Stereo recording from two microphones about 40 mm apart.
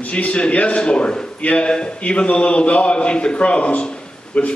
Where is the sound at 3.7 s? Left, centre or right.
Left.